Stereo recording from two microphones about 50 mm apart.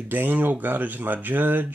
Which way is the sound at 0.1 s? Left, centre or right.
Right.